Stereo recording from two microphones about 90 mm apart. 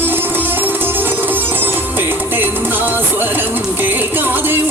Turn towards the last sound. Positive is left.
turn(degrees=-25)  # may be behind; listen again after turning